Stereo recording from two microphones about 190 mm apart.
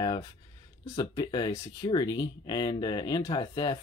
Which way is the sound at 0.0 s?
20° left (ahead or behind).